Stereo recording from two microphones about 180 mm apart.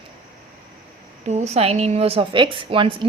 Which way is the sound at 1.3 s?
40° right (ahead or behind).